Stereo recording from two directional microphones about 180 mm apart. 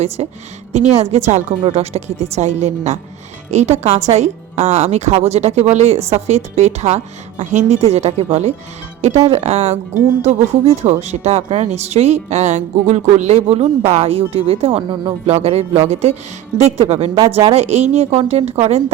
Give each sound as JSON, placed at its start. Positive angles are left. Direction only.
{"t": 0.2, "sound": "speech", "side_deg": -35}
{"t": 17.2, "sound": "speech", "side_deg": -15}
{"t": 17.5, "sound": "speech", "side_deg": -35}